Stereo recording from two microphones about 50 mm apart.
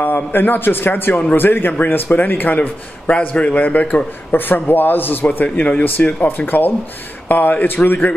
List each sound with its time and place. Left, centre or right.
0.0 s a man's voice: left
3.1 s a man's voice: left
5.4 s a man's voice: left
6.2 s speech: left